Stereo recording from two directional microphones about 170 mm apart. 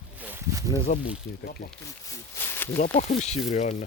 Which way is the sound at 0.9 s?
50° left (ahead or behind).